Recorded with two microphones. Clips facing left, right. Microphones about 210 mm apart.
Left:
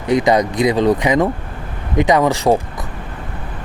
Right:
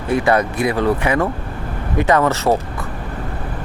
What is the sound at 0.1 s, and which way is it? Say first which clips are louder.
Speech: left 2 dB; 15° left (ahead or behind).